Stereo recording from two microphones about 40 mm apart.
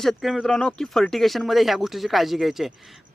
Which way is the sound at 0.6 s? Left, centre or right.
Centre.